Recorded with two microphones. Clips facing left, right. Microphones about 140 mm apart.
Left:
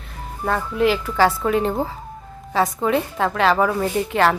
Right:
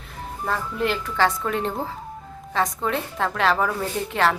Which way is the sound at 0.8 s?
5° left (ahead or behind).